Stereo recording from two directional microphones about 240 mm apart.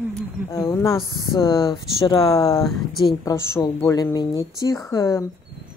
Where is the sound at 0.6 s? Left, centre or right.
Centre.